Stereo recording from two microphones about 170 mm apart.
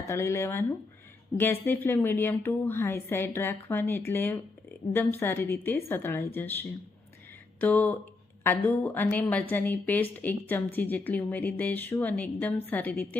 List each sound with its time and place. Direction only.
0.1 s a woman's voice: 15° left (ahead or behind)